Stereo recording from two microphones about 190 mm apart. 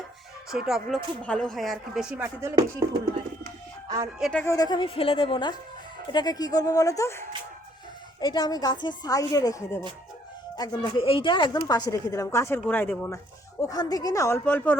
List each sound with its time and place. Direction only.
0.5 s speech: 5° right (ahead or behind)
3.8 s speech: 20° right (ahead or behind)
4.2 s speech: 5° left (ahead or behind)
4.4 s a woman's voice: 20° left (ahead or behind)